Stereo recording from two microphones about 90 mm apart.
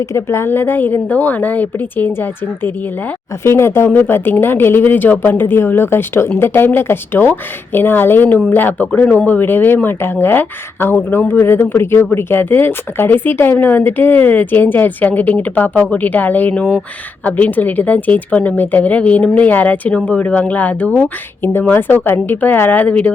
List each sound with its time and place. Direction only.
0.0 s speech: 35° left (ahead or behind); by 23.1 s 15° left (ahead or behind)